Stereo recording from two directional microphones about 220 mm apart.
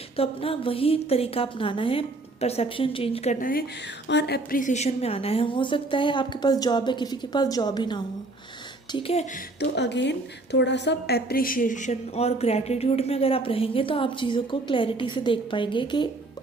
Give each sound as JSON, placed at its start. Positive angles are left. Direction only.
{"t": 0.2, "sound": "a woman's voice", "side_deg": 25}
{"t": 4.1, "sound": "a woman's voice", "side_deg": 50}
{"t": 9.6, "sound": "a woman's voice", "side_deg": 50}